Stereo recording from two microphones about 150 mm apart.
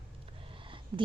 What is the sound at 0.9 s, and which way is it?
Speech, 30° right (ahead or behind).